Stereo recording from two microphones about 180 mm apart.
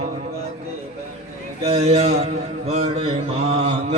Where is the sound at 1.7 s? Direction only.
35° right (ahead or behind).